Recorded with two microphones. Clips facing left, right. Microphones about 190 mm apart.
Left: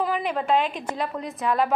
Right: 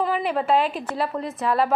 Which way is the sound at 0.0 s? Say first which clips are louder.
Right 2 dB; 5° right (ahead or behind).